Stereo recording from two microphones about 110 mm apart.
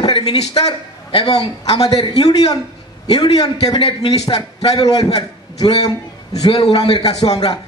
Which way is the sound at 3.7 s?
50° left (ahead or behind).